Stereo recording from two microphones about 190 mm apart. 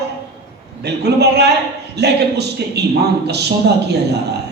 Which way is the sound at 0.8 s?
60° right (ahead or behind).